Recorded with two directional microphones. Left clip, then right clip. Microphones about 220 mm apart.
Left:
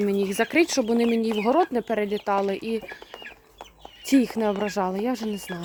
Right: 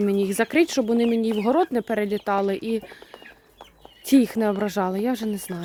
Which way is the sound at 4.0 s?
20° right (ahead or behind).